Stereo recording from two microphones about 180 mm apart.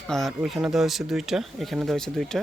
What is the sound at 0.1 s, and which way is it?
Speech, centre (ahead or behind).